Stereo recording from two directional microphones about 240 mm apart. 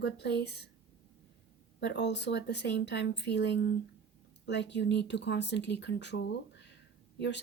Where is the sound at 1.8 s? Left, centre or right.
Left.